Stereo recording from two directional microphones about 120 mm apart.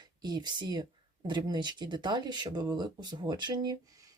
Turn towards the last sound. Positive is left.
turn(degrees=-40)  # may be behind; listen again after turning